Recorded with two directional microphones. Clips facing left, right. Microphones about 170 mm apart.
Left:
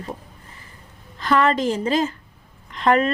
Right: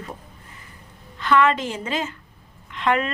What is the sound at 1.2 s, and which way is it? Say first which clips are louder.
A woman's voice: even; 35° left (ahead or behind).